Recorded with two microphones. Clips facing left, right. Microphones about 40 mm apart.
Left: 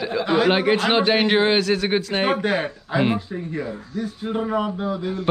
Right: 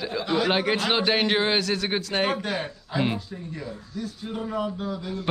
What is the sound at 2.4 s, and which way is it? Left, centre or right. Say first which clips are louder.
Speech: left 7 dB; left.